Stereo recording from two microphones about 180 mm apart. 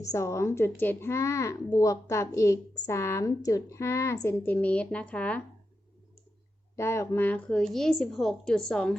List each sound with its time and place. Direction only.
0.0 s a woman's voice: 15° left (ahead or behind)
6.7 s a woman's voice: 15° left (ahead or behind)